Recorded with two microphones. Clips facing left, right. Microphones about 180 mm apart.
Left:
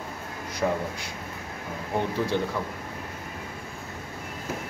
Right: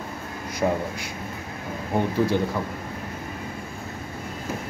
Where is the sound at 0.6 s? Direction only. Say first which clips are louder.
Right 3 dB; 15° right (ahead or behind).